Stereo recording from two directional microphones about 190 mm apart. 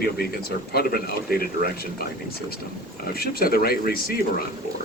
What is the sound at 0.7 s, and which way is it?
A man's voice, 55° left (ahead or behind).